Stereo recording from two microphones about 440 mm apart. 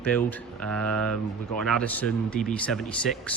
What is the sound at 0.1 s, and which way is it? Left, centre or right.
Speech, centre.